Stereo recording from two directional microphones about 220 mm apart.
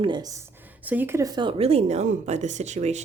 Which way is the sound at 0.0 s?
20° right (ahead or behind).